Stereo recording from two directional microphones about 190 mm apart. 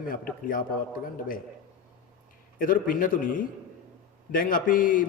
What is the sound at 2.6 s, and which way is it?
A man's voice, 45° left (ahead or behind).